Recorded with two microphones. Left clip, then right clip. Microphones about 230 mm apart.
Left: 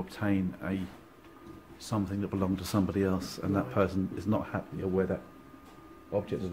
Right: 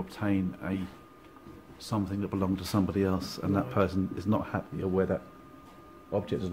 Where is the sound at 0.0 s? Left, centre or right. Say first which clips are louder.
Right 1 dB; centre.